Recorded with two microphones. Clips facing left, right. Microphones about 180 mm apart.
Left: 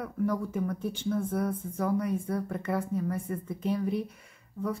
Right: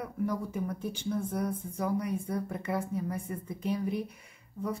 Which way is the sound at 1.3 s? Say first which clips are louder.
Left 2 dB; 15° right (ahead or behind).